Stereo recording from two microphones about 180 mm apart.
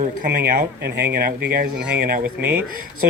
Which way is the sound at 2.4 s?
10° right (ahead or behind).